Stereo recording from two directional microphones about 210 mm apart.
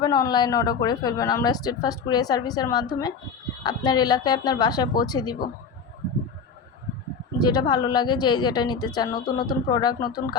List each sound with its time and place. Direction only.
0.0 s a woman's voice: 20° left (ahead or behind)
7.4 s a woman's voice: 20° left (ahead or behind)